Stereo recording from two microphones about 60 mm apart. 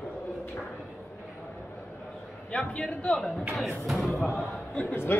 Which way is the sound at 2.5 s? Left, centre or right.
Centre.